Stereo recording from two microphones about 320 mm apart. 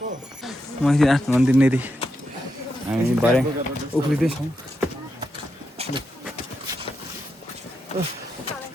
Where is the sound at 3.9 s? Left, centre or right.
Centre.